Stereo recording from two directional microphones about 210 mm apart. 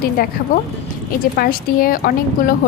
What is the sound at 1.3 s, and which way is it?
A woman's voice, 45° left (ahead or behind).